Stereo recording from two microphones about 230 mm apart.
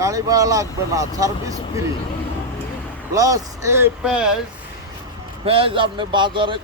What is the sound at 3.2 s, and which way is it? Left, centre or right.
Speech, centre.